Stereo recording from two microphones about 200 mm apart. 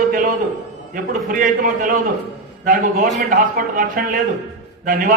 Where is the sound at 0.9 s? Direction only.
45° right (ahead or behind).